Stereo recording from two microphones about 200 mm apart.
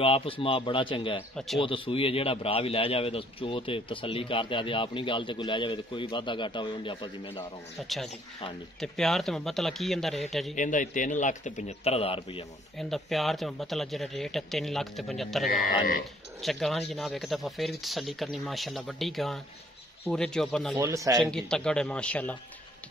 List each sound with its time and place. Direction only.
0.0 s a man's voice: 30° left (ahead or behind)
8.8 s a man's voice: centre (ahead or behind)
10.5 s speech: 40° left (ahead or behind)
12.7 s a man's voice: centre (ahead or behind)
15.6 s speech: 45° left (ahead or behind)
16.4 s a man's voice: centre (ahead or behind)
20.7 s speech: 15° right (ahead or behind)
21.2 s a man's voice: 5° left (ahead or behind)